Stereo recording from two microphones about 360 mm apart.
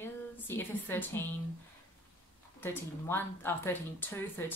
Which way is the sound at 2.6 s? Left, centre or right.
Centre.